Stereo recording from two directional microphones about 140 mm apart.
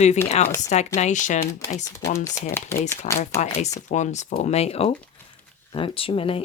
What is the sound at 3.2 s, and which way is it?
Speech, 55° left (ahead or behind).